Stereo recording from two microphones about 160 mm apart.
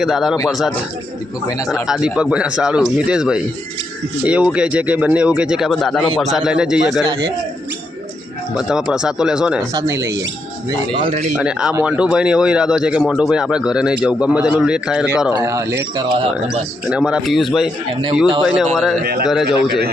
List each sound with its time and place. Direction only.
0.0 s speech: centre (ahead or behind)
1.5 s speech: 20° left (ahead or behind)
1.9 s speech: 5° right (ahead or behind)
8.5 s speech: 5° right (ahead or behind)
9.7 s speech: 20° right (ahead or behind)
11.0 s a man's voice: 40° right (ahead or behind)
11.3 s speech: 5° right (ahead or behind)
15.4 s speech: 20° right (ahead or behind)
16.9 s speech: 5° right (ahead or behind)